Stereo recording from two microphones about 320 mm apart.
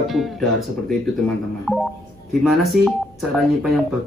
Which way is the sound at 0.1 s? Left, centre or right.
Centre.